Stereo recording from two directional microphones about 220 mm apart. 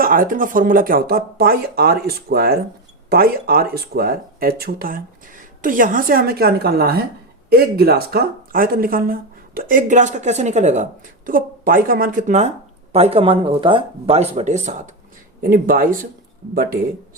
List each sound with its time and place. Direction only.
0.0 s speech: 40° right (ahead or behind)